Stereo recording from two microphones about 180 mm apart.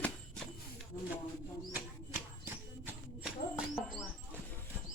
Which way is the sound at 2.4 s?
10° right (ahead or behind).